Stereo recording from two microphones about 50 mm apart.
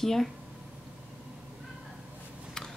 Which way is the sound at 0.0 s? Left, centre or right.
Centre.